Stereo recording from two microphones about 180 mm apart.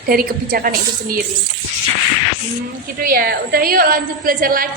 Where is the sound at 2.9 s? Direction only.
50° right (ahead or behind).